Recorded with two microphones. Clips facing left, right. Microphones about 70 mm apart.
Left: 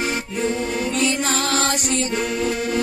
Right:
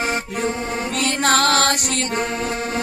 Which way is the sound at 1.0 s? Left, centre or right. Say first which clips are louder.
Right 7 dB; right.